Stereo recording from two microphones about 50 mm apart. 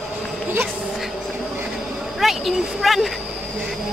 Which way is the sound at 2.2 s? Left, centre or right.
Centre.